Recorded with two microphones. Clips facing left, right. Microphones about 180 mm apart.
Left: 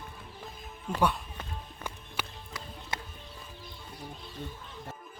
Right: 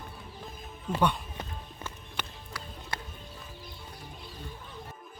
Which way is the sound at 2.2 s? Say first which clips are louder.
Left 1 dB; 10° left (ahead or behind).